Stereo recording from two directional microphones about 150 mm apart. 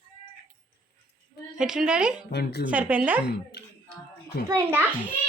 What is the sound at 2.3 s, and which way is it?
Speech, 90° left.